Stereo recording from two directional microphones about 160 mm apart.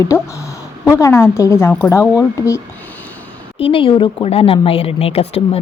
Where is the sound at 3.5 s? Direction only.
35° left (ahead or behind).